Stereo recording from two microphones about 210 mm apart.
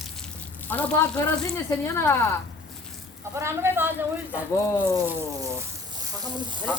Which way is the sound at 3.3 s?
10° right (ahead or behind).